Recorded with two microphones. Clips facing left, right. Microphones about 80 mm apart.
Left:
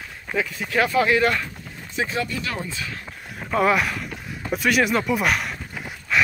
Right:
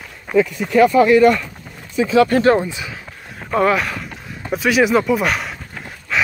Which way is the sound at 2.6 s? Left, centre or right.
Centre.